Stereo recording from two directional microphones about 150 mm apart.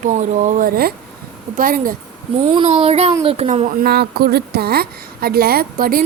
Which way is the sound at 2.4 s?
35° right (ahead or behind).